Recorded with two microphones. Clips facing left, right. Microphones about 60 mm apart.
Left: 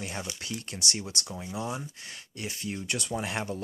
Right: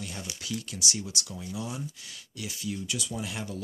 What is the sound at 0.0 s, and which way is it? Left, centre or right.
Speech, left.